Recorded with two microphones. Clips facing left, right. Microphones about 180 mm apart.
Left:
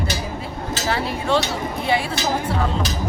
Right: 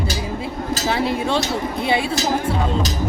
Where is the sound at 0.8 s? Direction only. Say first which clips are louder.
Right 2 dB; 15° right (ahead or behind).